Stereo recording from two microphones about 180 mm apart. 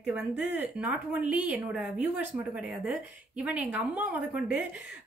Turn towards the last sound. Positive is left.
turn(degrees=-5)  # may be behind; listen again after turning